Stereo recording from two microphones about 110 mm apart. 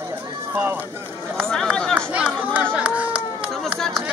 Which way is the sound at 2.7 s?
10° right (ahead or behind).